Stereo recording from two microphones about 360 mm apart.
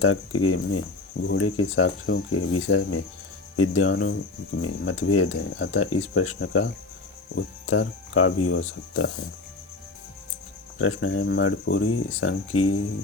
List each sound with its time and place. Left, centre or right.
0.0 s speech: left
10.8 s speech: left